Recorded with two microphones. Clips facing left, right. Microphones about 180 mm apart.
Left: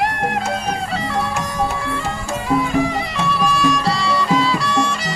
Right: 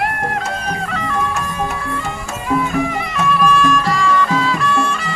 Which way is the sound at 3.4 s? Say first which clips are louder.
Right 1 dB; 35° left (ahead or behind).